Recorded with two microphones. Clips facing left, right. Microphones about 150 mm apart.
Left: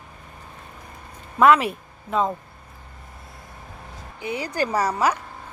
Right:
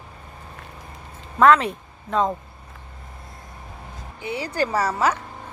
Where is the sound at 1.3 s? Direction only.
10° left (ahead or behind).